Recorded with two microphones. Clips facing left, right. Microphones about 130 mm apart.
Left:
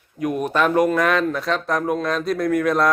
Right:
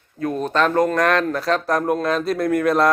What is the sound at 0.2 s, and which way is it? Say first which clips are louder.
Speech: even; 15° left (ahead or behind).